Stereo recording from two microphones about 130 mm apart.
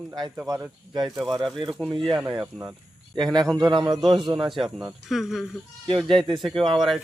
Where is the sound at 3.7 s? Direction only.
35° right (ahead or behind).